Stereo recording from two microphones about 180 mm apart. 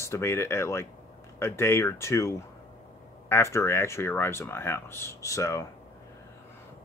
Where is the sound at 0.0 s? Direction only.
15° left (ahead or behind).